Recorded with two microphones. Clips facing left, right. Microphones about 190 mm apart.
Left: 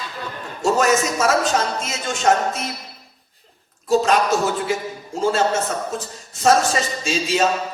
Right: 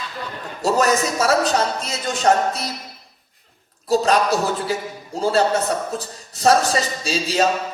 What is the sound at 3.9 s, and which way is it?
A man's voice, 35° right (ahead or behind).